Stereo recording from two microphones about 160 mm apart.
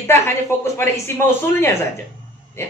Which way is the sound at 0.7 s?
15° left (ahead or behind).